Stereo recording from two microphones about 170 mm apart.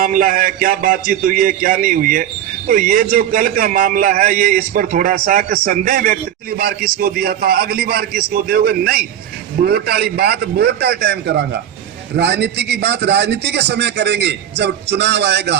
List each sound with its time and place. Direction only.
0.0 s a man's voice: 55° right (ahead or behind); by 15.5 s 80° right